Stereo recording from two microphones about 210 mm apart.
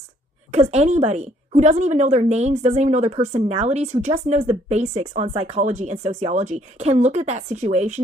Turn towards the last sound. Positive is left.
turn(degrees=-35)  # may be behind; listen again after turning